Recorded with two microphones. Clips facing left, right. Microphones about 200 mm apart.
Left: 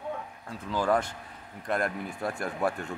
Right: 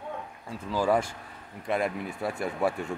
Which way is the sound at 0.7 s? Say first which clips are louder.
Right 1 dB; 10° right (ahead or behind).